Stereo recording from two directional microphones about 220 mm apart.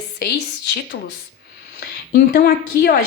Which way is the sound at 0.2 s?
50° left (ahead or behind).